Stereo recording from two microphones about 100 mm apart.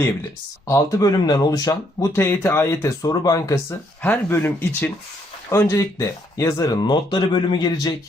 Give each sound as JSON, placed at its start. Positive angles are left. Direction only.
{"t": 0.7, "sound": "speech", "side_deg": 35}
{"t": 3.0, "sound": "speech", "side_deg": 40}
{"t": 4.0, "sound": "speech", "side_deg": 20}